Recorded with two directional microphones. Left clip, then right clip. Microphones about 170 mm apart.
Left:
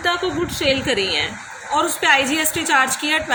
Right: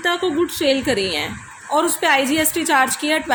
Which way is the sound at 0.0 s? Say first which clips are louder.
Right 1 dB; 60° right (ahead or behind).